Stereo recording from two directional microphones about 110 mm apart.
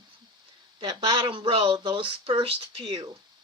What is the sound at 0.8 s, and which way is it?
Speech, 50° right (ahead or behind).